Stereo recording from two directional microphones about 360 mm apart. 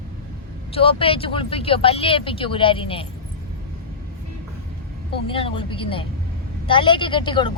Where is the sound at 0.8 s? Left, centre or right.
Centre.